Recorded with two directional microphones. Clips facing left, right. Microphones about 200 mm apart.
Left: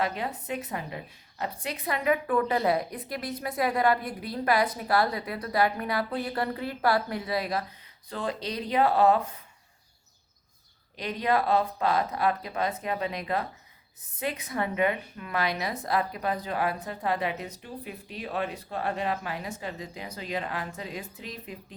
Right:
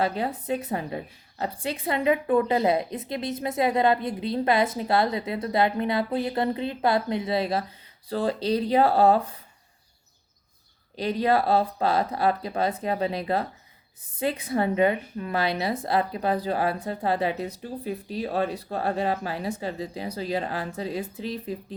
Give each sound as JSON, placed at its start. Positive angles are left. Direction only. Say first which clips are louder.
{"t": 0.0, "sound": "a woman's voice", "louder": "right 4 dB", "side_deg": -30}
{"t": 10.9, "sound": "a woman's voice", "louder": "right 4 dB", "side_deg": -30}